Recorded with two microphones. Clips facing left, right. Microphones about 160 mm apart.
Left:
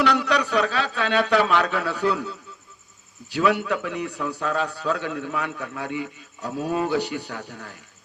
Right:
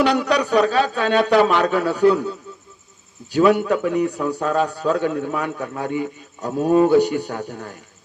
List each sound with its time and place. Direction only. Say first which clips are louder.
0.0 s a man's voice: right 4 dB; 45° right (ahead or behind)